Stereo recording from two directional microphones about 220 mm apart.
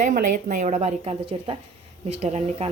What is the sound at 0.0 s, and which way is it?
Speech, 35° right (ahead or behind).